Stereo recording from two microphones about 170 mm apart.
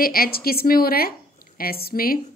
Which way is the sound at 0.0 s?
60° left (ahead or behind).